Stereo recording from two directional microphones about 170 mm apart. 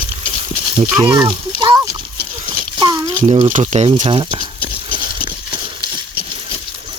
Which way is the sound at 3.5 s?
40° right (ahead or behind).